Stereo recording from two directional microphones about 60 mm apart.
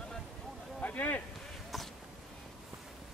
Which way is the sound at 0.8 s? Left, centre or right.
Left.